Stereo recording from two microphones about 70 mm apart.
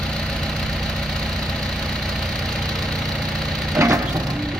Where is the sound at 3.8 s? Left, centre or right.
Right.